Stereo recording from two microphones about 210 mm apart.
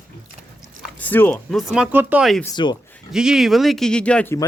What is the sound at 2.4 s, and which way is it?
Speech, 20° left (ahead or behind).